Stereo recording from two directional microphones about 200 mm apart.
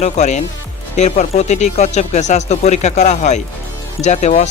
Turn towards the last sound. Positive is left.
turn(degrees=35)  # may be behind; listen again after turning